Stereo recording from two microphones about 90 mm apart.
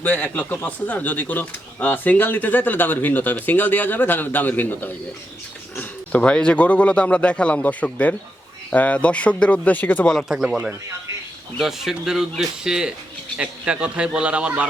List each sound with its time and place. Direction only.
0.0 s speech: 15° left (ahead or behind)
10.2 s a man's voice: 5° right (ahead or behind)